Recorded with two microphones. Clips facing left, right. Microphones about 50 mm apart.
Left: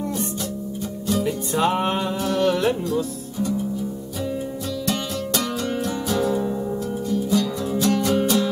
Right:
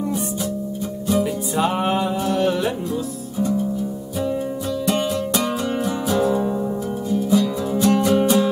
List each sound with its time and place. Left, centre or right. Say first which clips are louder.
1.2 s music: even; centre
2.9 s speech: left 1 dB; right
4.8 s music: right 6 dB; centre